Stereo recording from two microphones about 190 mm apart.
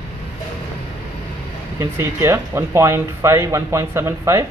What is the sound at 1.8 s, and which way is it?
Speech, 15° right (ahead or behind).